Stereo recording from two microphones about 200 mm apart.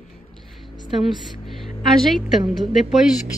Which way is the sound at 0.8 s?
Centre (ahead or behind).